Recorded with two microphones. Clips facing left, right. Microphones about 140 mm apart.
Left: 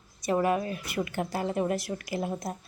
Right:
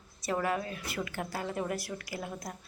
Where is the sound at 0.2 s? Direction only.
20° left (ahead or behind).